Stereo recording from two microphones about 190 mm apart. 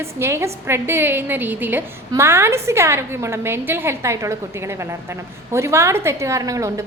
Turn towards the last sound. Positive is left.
turn(degrees=-15)  # may be behind; listen again after turning